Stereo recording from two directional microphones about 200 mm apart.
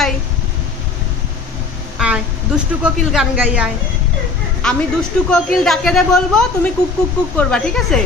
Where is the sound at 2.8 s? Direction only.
5° right (ahead or behind).